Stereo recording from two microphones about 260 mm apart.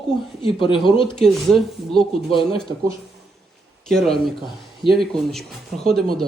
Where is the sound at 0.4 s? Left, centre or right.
Centre.